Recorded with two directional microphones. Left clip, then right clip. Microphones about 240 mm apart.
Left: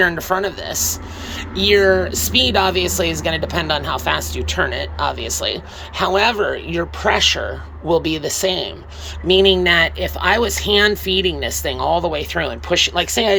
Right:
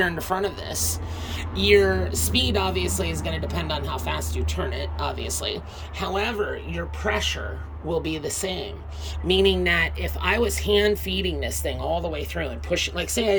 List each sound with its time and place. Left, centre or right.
0.0 s speech: centre
6.3 s speech: left
7.9 s speech: centre